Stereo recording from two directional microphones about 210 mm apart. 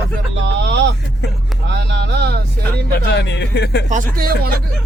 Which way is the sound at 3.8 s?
40° right (ahead or behind).